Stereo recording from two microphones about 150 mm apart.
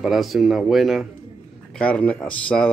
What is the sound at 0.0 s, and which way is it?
Speech, centre (ahead or behind).